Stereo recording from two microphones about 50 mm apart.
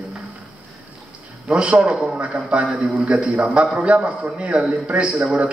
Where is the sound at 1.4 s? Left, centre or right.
Right.